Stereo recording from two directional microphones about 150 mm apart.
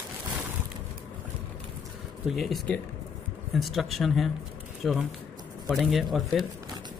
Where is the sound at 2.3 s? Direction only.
Centre (ahead or behind).